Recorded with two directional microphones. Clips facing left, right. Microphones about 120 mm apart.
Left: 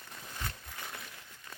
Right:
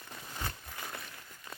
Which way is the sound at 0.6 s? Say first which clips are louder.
Right 2 dB; 5° right (ahead or behind).